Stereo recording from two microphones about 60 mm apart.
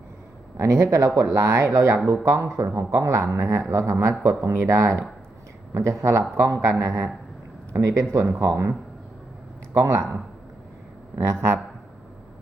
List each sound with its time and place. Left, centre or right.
0.5 s speech: right
1.4 s speech: right
9.7 s speech: right